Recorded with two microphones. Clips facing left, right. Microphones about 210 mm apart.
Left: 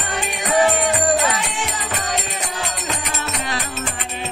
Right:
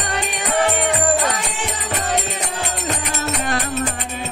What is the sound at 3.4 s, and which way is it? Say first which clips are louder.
Music: right 5 dB; 50° right (ahead or behind).